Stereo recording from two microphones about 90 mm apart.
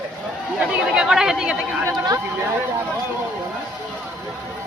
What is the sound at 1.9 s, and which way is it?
Speech, 45° right (ahead or behind).